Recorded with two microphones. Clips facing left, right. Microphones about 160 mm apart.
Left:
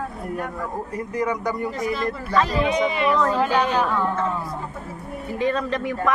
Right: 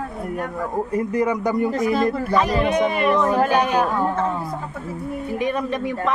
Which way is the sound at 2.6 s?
50° right (ahead or behind).